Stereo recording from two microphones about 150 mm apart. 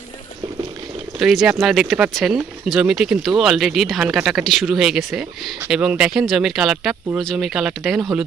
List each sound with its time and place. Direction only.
1.2 s speech: 5° right (ahead or behind)